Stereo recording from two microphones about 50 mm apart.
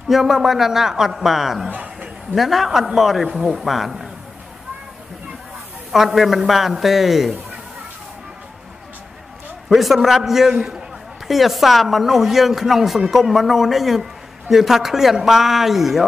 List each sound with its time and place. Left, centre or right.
0.1 s speech: centre
1.7 s a sound: right
2.3 s speech: centre
5.9 s speech: centre
9.7 s speech: centre